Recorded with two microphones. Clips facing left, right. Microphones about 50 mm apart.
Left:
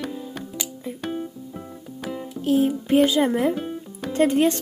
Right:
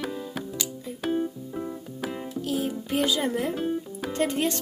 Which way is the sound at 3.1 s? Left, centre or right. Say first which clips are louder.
Left 6 dB; left.